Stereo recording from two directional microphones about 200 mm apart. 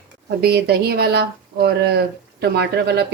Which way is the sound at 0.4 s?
55° right (ahead or behind).